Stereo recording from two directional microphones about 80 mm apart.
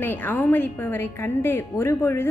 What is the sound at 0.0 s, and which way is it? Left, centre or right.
A woman's voice, left.